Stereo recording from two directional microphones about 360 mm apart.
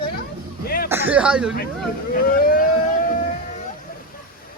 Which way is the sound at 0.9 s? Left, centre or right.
Centre.